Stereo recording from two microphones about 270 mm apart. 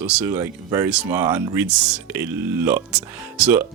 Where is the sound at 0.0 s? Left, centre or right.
Centre.